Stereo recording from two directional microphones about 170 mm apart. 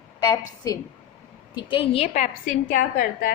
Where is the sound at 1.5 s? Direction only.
30° left (ahead or behind); by 3.3 s 55° left (ahead or behind).